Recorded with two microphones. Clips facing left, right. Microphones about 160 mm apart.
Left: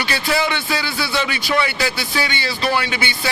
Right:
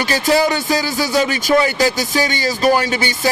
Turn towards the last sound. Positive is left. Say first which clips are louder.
# right 6 dB
turn(degrees=-40)  # may be behind; listen again after turning